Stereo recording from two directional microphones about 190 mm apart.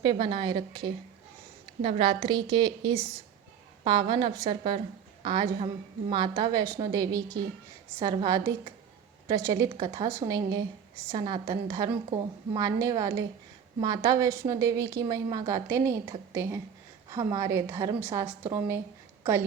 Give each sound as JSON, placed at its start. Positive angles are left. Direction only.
{"t": 0.0, "sound": "a woman's voice", "side_deg": -25}
{"t": 1.8, "sound": "a woman's voice", "side_deg": -30}